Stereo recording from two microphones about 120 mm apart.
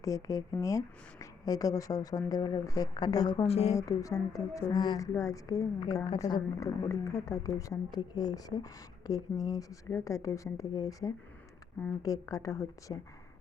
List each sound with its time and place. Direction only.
0.0 s a woman's voice: 30° left (ahead or behind)
3.4 s speech: 60° left (ahead or behind)
3.8 s a woman's voice: 25° left (ahead or behind)